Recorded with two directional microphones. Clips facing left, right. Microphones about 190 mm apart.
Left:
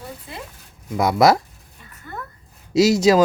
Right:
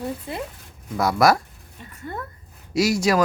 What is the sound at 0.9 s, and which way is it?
Speech, 20° left (ahead or behind).